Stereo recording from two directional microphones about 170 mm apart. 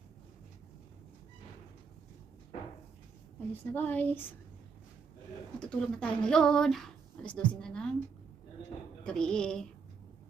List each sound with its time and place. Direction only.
3.5 s speech: 10° left (ahead or behind)
5.5 s speech: 5° left (ahead or behind)
9.0 s a sound: 5° left (ahead or behind)